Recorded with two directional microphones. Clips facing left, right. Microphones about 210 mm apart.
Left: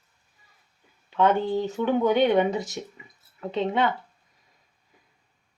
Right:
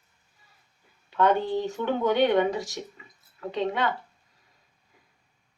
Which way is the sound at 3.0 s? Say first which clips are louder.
Left 2 dB; 15° left (ahead or behind).